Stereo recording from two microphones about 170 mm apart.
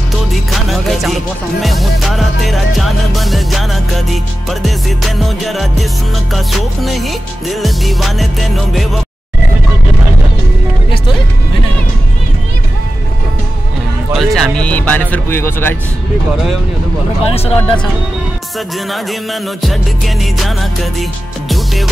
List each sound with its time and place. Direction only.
0.5 s music: centre (ahead or behind)
14.1 s speech: centre (ahead or behind)
17.2 s speech: 35° left (ahead or behind)
18.9 s music: centre (ahead or behind)